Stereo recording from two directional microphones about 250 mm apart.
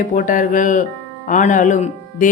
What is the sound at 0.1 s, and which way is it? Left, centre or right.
Speech, left.